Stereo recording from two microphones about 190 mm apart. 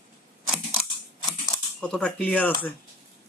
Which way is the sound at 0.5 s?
5° right (ahead or behind).